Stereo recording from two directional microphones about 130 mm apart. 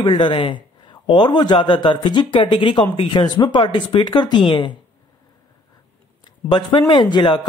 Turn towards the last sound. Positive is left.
turn(degrees=35)  # may be behind; listen again after turning